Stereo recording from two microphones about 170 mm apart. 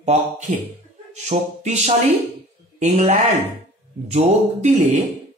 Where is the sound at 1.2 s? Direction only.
40° right (ahead or behind).